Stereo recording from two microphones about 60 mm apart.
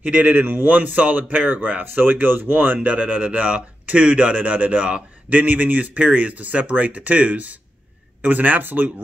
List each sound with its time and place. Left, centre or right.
0.0 s speech: right